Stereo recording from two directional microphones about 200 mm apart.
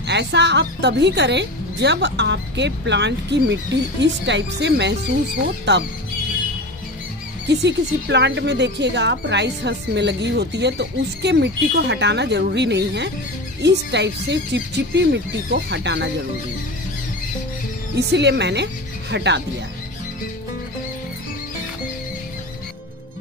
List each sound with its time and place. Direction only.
0.0 s speech: 60° right (ahead or behind)
7.4 s speech: 60° right (ahead or behind)
17.9 s speech: 60° right (ahead or behind)